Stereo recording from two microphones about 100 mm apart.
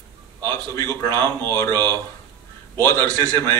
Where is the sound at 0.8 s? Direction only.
40° right (ahead or behind).